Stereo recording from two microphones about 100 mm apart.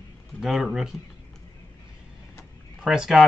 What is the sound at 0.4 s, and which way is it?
Speech, 5° right (ahead or behind).